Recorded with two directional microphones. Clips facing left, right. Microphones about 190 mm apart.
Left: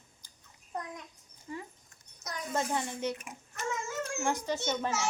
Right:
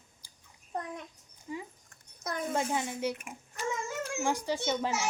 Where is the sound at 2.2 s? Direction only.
55° right (ahead or behind).